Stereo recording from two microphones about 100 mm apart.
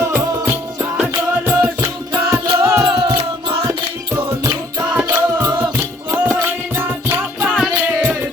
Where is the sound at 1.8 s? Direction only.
30° right (ahead or behind).